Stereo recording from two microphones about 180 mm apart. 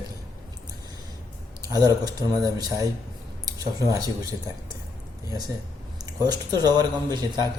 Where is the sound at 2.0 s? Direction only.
20° right (ahead or behind).